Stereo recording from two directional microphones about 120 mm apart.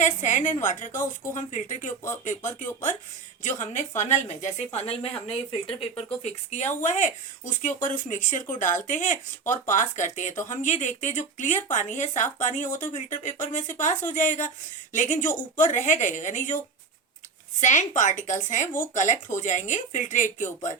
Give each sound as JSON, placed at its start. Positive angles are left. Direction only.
{"t": 0.0, "sound": "speech", "side_deg": 90}
{"t": 5.3, "sound": "speech", "side_deg": 50}
{"t": 6.2, "sound": "speech", "side_deg": 70}
{"t": 17.6, "sound": "speech", "side_deg": 90}